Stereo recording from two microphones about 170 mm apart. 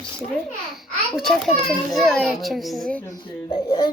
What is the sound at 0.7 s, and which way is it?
A child's voice, centre (ahead or behind).